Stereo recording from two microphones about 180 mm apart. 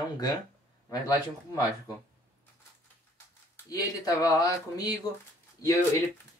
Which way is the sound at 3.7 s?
20° left (ahead or behind).